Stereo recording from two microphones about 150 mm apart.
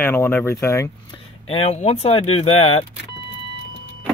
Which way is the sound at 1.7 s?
45° left (ahead or behind).